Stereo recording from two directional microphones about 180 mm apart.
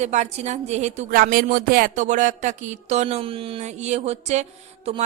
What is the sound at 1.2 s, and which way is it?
Speech, 55° right (ahead or behind).